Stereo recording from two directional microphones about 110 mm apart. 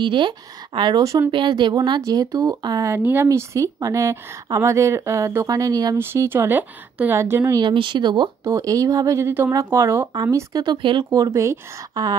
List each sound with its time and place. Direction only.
0.0 s speech: 50° right (ahead or behind)
1.3 s speech: 45° right (ahead or behind)
2.0 s speech: 30° right (ahead or behind)
2.9 s a woman's voice: 20° right (ahead or behind); by 5.9 s 35° right (ahead or behind)
5.9 s a woman's voice: 20° right (ahead or behind)
7.5 s speech: 45° right (ahead or behind)
8.5 s a woman's voice: 30° right (ahead or behind)
10.6 s speech: 45° right (ahead or behind)
11.1 s speech: 30° right (ahead or behind)